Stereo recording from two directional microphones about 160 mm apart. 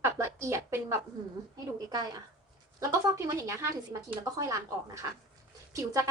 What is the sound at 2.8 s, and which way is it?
A woman's voice, 20° right (ahead or behind).